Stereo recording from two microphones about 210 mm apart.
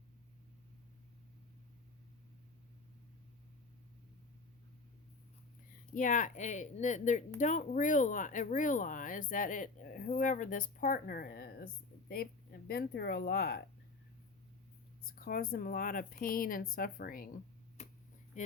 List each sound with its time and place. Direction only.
5.9 s speech: 40° left (ahead or behind)
15.0 s speech: 45° left (ahead or behind)
17.8 s a sound: 30° left (ahead or behind)
18.3 s speech: 35° left (ahead or behind)